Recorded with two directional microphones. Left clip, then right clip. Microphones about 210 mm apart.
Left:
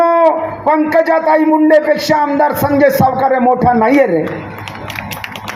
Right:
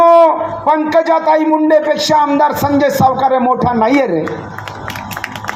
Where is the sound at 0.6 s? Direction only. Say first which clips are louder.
Even; 40° left (ahead or behind).